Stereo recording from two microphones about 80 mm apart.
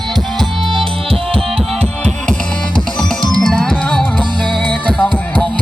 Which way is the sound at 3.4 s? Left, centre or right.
Centre.